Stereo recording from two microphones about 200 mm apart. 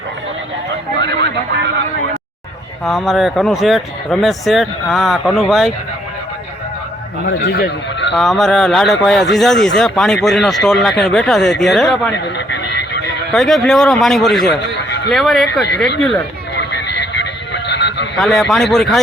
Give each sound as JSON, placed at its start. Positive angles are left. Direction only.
{"t": 0.9, "sound": "a sound", "side_deg": -60}
{"t": 2.8, "sound": "speech", "side_deg": 0}
{"t": 7.3, "sound": "speech", "side_deg": 60}
{"t": 8.1, "sound": "speech", "side_deg": 0}
{"t": 13.3, "sound": "speech", "side_deg": 0}
{"t": 14.8, "sound": "a sound", "side_deg": 60}
{"t": 15.1, "sound": "speech", "side_deg": 0}
{"t": 16.6, "sound": "a sound", "side_deg": 60}
{"t": 18.2, "sound": "speech", "side_deg": 0}